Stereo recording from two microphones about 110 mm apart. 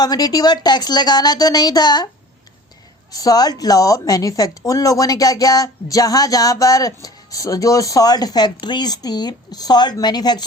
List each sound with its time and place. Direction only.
0.0 s speech: 35° left (ahead or behind)
3.1 s speech: 35° left (ahead or behind)